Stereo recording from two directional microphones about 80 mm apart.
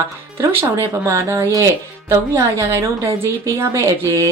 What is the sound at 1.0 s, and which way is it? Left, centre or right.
A woman's voice, right.